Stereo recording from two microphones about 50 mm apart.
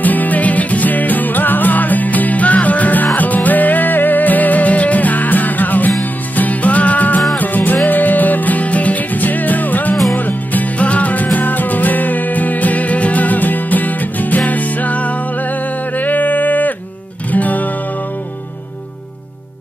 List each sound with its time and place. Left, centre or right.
0.0 s music: left